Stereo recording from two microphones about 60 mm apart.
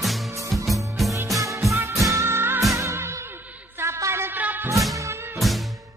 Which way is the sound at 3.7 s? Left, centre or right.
Right.